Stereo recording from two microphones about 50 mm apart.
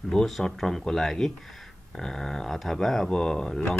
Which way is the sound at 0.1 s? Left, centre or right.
Centre.